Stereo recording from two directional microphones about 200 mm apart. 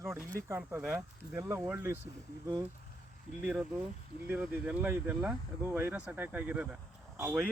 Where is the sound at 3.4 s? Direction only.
5° right (ahead or behind).